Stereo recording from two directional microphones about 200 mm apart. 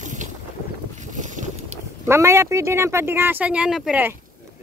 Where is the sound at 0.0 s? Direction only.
40° right (ahead or behind).